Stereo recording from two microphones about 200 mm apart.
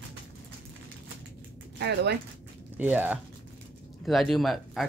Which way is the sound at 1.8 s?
55° right (ahead or behind).